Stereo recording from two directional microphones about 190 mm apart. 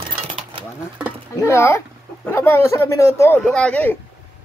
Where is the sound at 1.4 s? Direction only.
15° left (ahead or behind).